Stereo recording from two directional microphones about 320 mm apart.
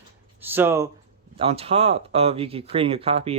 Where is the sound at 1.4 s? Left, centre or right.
Centre.